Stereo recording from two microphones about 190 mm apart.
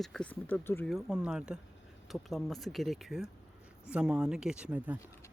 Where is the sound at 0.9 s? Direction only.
Centre (ahead or behind).